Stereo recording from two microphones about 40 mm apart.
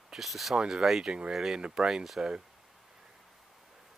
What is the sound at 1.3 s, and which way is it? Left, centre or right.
Speech, centre.